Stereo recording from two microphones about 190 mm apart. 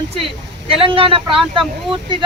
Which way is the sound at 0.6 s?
30° right (ahead or behind).